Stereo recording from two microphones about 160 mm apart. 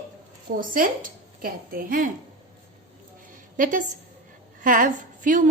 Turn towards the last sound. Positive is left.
turn(degrees=-55)  # may be behind; listen again after turning